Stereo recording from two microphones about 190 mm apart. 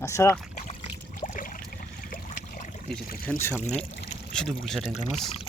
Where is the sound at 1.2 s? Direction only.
45° left (ahead or behind).